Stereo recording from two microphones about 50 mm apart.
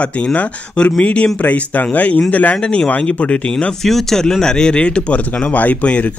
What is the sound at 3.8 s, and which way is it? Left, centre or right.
Speech, centre.